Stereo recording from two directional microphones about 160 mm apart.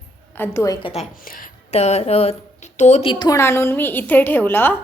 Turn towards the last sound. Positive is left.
turn(degrees=15)  # may be behind; listen again after turning